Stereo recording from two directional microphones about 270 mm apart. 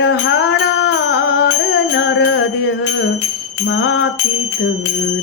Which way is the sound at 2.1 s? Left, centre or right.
Left.